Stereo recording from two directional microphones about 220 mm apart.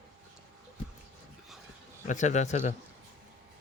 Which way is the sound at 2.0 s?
35° left (ahead or behind).